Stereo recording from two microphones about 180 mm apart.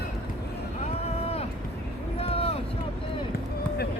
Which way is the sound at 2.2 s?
30° left (ahead or behind).